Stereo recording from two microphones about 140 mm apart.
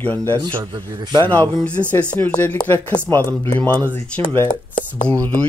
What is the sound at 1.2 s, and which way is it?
Speech, 15° left (ahead or behind).